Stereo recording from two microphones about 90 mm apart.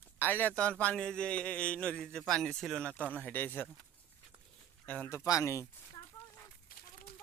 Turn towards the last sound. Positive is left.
turn(degrees=35)  # may be behind; listen again after turning